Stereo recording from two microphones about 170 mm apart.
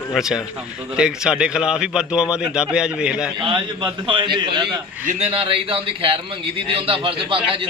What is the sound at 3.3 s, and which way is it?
A man's voice, 30° right (ahead or behind).